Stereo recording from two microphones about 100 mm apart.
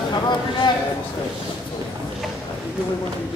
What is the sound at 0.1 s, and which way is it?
Speech, 45° left (ahead or behind).